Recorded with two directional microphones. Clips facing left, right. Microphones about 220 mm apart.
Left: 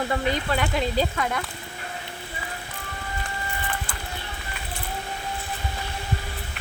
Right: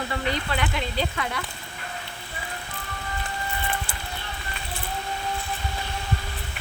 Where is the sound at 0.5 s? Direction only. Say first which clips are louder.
Left 4 dB; 45° left (ahead or behind).